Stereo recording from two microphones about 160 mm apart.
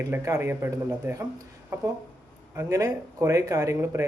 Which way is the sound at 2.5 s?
20° right (ahead or behind).